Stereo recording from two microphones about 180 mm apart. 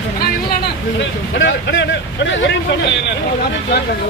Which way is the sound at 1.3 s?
90° left.